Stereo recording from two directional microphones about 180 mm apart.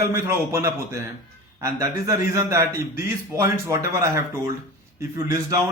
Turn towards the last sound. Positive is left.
turn(degrees=-15)  # may be behind; listen again after turning